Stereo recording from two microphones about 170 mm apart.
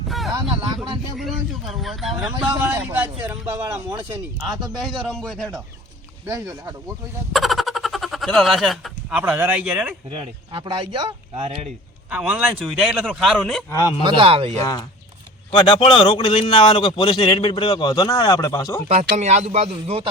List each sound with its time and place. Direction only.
1.1 s a man's voice: centre (ahead or behind)
4.8 s a man's voice: centre (ahead or behind)
6.2 s a man's voice: 15° right (ahead or behind)
7.3 s speech: centre (ahead or behind)
10.1 s speech: 30° right (ahead or behind)
12.1 s a man's voice: 10° right (ahead or behind)
13.7 s a man's voice: 20° left (ahead or behind)
14.0 s speech: 30° right (ahead or behind)
14.6 s a man's voice: 20° left (ahead or behind)
19.1 s speech: 40° right (ahead or behind)